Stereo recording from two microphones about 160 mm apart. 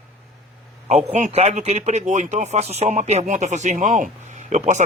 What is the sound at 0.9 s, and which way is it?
Speech, 45° right (ahead or behind).